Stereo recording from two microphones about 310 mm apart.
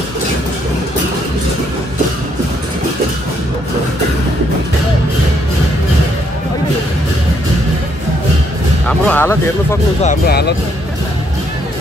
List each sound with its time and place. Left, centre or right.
8.8 s speech: centre
10.0 s speech: left